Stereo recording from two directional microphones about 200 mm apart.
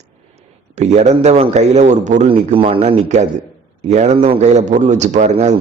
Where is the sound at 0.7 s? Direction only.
35° right (ahead or behind).